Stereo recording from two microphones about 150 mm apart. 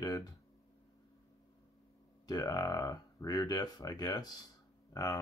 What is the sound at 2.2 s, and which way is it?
Speech, 25° left (ahead or behind).